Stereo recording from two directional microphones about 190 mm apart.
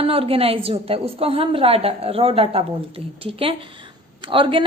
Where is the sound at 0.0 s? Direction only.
30° right (ahead or behind).